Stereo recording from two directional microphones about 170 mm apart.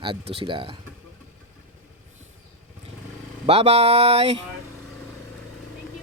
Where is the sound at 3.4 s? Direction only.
35° right (ahead or behind).